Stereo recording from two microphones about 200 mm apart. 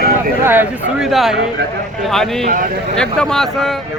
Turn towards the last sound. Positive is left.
turn(degrees=5)  # may be behind; listen again after turning